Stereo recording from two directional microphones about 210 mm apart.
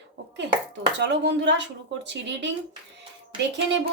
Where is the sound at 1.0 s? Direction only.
55° right (ahead or behind).